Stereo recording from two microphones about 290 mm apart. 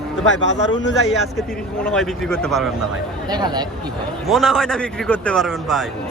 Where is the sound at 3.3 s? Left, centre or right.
Centre.